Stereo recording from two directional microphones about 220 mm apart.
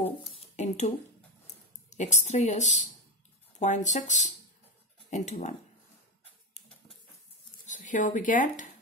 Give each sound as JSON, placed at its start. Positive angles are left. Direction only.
{"t": 0.6, "sound": "a woman's voice", "side_deg": 30}
{"t": 7.6, "sound": "speech", "side_deg": 35}